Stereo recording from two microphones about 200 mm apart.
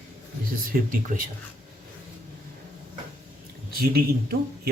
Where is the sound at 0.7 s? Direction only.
40° right (ahead or behind).